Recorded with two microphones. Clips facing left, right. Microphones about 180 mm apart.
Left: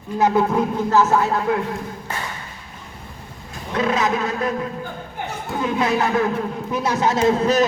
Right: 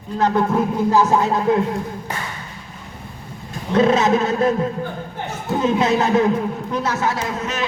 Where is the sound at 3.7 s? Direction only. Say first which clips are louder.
Right 5 dB; 25° right (ahead or behind).